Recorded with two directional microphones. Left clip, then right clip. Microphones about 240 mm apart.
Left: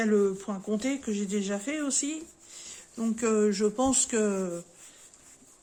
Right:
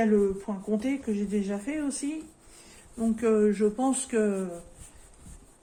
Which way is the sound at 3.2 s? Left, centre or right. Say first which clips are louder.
Right 2 dB; left.